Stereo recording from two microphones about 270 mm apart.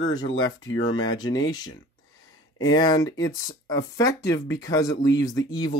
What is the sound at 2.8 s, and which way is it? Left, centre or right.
Speech, centre.